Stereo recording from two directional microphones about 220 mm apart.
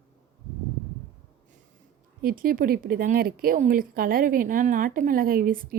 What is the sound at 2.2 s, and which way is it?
A woman's voice, 40° right (ahead or behind).